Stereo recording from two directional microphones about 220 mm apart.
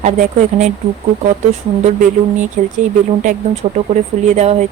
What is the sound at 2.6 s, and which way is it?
Speech, 35° right (ahead or behind).